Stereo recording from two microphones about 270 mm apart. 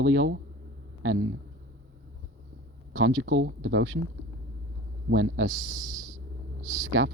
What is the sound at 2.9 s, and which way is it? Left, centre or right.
Speech, right.